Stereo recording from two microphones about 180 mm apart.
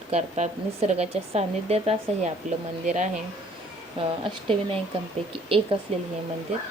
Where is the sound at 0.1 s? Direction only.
40° right (ahead or behind).